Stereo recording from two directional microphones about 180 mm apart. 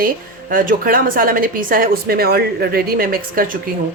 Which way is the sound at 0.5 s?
50° right (ahead or behind).